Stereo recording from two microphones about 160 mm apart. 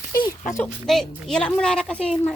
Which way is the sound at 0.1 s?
25° left (ahead or behind).